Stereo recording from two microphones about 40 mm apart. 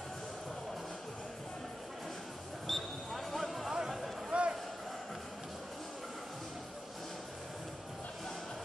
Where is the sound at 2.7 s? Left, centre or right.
Centre.